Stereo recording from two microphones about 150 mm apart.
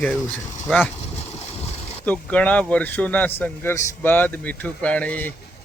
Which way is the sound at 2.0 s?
10° left (ahead or behind).